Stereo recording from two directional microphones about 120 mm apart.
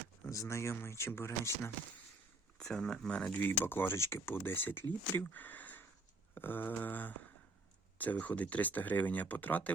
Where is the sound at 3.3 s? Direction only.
15° left (ahead or behind).